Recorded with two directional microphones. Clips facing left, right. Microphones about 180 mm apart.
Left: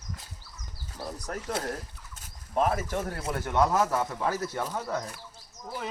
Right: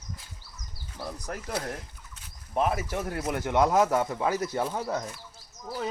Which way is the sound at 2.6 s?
10° right (ahead or behind).